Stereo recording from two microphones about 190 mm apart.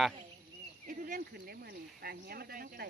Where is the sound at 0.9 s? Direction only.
45° right (ahead or behind).